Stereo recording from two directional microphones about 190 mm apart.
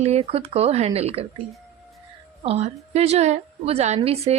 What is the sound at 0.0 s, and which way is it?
A woman's voice, 35° right (ahead or behind).